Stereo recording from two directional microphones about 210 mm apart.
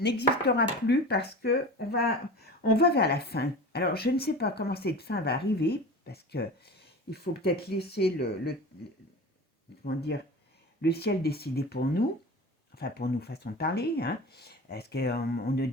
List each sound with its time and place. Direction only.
0.0 s speech: 50° left (ahead or behind)
9.8 s speech: 50° left (ahead or behind)